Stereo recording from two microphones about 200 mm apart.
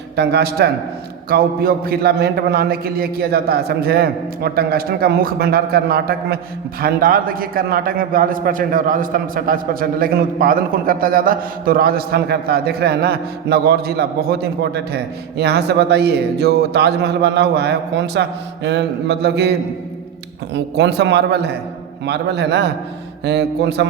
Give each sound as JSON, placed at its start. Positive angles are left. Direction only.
{"t": 0.2, "sound": "a man's voice", "side_deg": -55}